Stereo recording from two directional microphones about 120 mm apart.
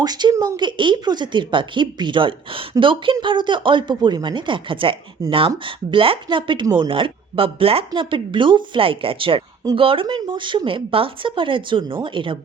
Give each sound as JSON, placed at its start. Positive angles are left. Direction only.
{"t": 0.0, "sound": "speech", "side_deg": -35}